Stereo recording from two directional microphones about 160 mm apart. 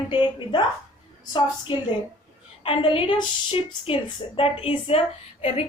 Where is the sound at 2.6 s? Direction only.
35° left (ahead or behind).